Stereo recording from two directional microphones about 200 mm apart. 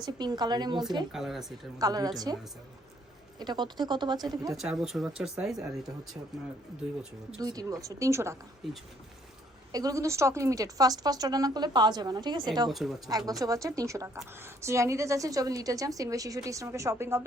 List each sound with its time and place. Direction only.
0.0 s a woman's voice: 20° right (ahead or behind)
1.1 s speech: centre (ahead or behind)
1.8 s a woman's voice: 20° right (ahead or behind)
4.5 s speech: centre (ahead or behind)
7.3 s a woman's voice: 20° right (ahead or behind)
8.6 s speech: centre (ahead or behind)
9.7 s a woman's voice: 15° right (ahead or behind)
12.7 s speech: centre (ahead or behind)
13.1 s a woman's voice: 20° right (ahead or behind)